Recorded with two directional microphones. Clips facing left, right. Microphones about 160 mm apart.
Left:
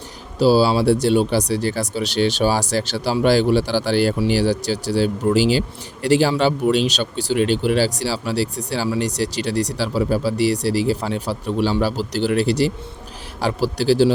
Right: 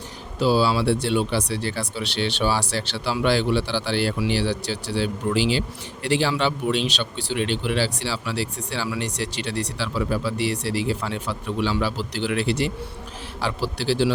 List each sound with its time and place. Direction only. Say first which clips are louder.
0.3 s speech: left 5 dB; 35° left (ahead or behind)